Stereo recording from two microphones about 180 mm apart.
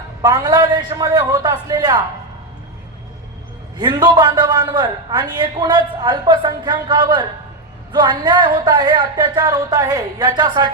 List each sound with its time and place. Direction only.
0.2 s a man's voice: 20° right (ahead or behind)
3.8 s a man's voice: 25° right (ahead or behind)